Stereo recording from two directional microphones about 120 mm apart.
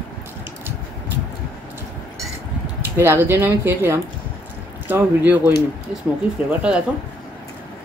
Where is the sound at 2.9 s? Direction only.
20° right (ahead or behind).